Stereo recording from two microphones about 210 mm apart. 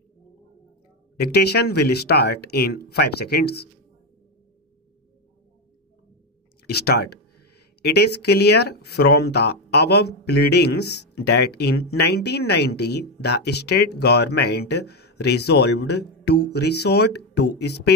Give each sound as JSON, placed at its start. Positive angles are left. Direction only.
{"t": 1.2, "sound": "speech", "side_deg": 50}
{"t": 6.8, "sound": "speech", "side_deg": 50}